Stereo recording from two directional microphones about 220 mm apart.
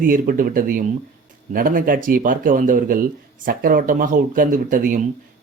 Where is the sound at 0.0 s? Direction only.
40° right (ahead or behind).